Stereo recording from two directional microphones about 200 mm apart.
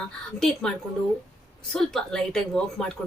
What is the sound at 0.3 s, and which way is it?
Speech, 5° left (ahead or behind).